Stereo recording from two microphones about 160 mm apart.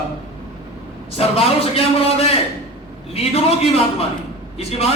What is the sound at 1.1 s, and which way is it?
A man's voice, 40° left (ahead or behind).